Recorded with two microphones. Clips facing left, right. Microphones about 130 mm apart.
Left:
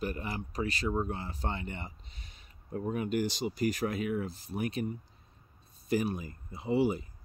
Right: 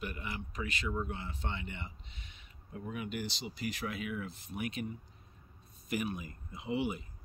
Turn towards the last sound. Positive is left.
turn(degrees=35)  # may be behind; listen again after turning